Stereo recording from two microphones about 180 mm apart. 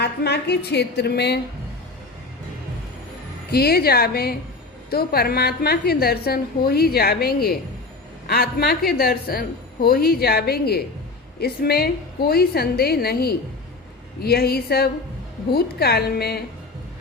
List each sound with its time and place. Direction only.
0.0 s a woman's voice: 65° left (ahead or behind)
3.5 s a woman's voice: 60° left (ahead or behind)